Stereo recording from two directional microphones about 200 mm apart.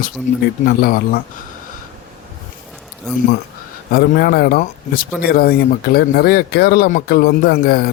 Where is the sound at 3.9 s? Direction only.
50° left (ahead or behind).